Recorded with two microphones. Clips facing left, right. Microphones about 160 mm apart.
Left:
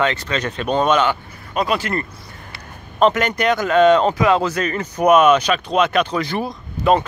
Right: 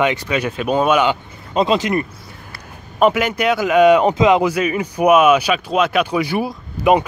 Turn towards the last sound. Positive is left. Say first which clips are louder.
# right 2 dB
turn(degrees=-10)  # may be behind; listen again after turning